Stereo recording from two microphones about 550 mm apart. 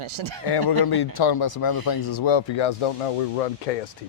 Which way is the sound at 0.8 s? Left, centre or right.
Left.